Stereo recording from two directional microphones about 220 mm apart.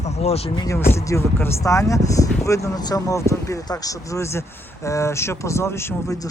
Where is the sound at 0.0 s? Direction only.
30° left (ahead or behind).